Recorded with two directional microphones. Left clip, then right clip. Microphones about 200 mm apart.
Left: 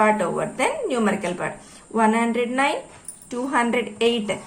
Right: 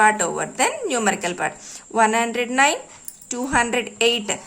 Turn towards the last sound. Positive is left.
turn(degrees=-35)  # may be behind; listen again after turning